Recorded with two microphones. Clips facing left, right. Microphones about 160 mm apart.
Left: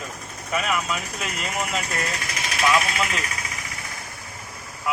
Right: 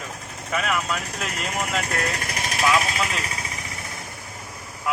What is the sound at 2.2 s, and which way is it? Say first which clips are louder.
Speech: right 2 dB; 45° right (ahead or behind).